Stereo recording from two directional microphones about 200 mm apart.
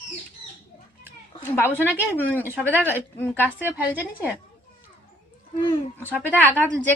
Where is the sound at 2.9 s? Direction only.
10° left (ahead or behind).